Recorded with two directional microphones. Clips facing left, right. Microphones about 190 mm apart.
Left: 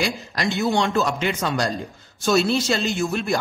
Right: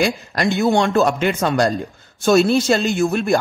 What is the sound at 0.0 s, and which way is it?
A man's voice, 50° right (ahead or behind).